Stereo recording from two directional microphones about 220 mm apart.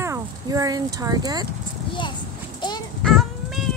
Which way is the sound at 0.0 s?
15° right (ahead or behind).